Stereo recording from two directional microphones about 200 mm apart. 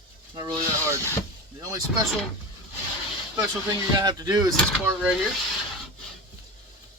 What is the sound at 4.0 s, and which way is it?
Speech, 20° right (ahead or behind).